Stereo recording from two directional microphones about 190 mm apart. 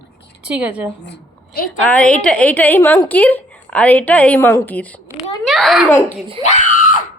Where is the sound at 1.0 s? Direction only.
55° left (ahead or behind).